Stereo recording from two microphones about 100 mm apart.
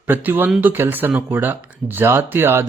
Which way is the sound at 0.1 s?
20° right (ahead or behind).